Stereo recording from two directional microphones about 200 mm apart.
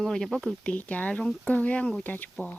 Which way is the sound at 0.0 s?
Centre (ahead or behind).